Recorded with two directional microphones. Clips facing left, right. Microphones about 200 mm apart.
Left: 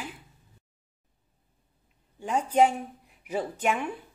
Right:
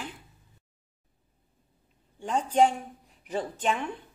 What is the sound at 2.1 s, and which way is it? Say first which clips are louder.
Speech: left 1 dB; 10° left (ahead or behind).